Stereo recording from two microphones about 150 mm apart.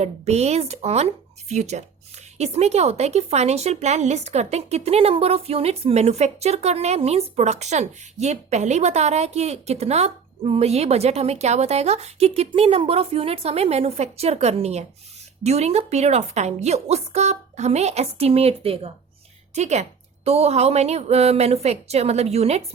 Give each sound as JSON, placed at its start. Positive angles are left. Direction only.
{"t": 0.0, "sound": "a woman's voice", "side_deg": -45}